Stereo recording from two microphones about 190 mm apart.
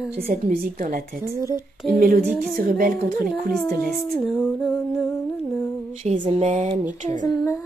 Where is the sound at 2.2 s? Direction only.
Centre (ahead or behind).